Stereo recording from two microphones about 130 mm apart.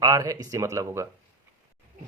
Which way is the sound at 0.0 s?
30° right (ahead or behind).